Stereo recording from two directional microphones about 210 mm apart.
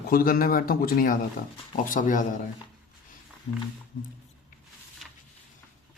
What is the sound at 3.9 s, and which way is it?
Speech, 40° left (ahead or behind).